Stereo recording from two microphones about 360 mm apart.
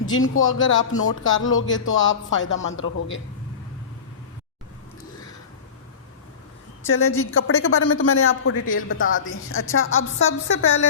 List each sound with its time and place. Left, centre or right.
0.1 s speech: left
6.8 s speech: left